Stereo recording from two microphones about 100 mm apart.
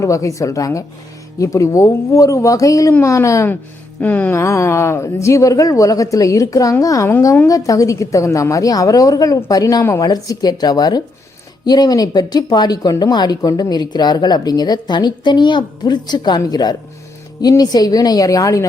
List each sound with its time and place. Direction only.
0.0 s a woman's voice: 30° left (ahead or behind)
4.0 s music: 15° left (ahead or behind)
4.4 s speech: 30° left (ahead or behind)